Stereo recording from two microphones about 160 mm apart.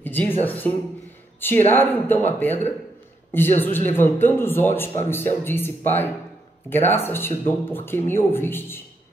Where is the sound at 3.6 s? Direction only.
15° left (ahead or behind).